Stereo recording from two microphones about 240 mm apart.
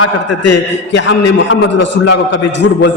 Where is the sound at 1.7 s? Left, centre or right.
Left.